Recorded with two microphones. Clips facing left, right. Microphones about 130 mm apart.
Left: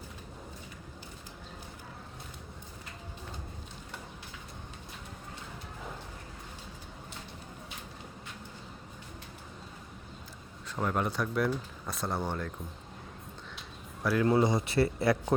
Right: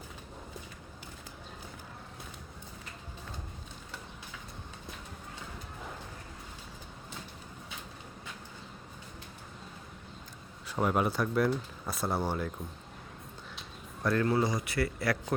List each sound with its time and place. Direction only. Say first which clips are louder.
10.7 s speech: right 3 dB; 10° right (ahead or behind)
14.0 s speech: even; 5° left (ahead or behind)
14.3 s speech: left 3 dB; 25° left (ahead or behind)